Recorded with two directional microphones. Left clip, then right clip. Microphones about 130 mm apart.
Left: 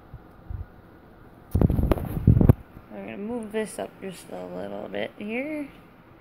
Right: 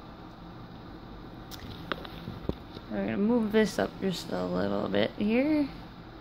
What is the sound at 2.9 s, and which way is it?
Speech, 15° right (ahead or behind).